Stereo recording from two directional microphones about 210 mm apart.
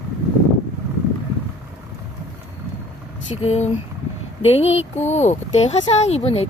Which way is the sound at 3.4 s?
30° left (ahead or behind).